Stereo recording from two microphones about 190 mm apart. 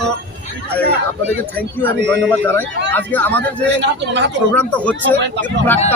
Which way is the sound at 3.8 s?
65° right (ahead or behind).